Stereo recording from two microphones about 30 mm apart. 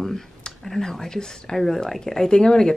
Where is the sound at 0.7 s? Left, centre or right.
Centre.